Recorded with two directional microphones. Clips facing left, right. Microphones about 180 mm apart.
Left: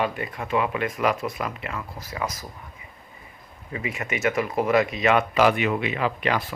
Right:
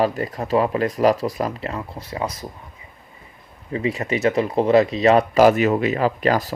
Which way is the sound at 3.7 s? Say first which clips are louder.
Right 7 dB; 30° right (ahead or behind).